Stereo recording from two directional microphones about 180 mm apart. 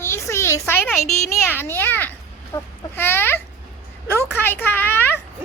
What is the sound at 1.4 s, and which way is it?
Speech, 10° left (ahead or behind).